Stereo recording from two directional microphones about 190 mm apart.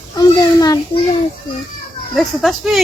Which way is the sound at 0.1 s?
20° left (ahead or behind).